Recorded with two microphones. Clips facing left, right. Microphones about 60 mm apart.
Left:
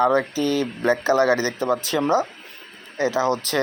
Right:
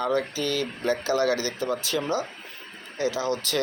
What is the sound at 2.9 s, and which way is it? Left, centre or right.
Speech, left.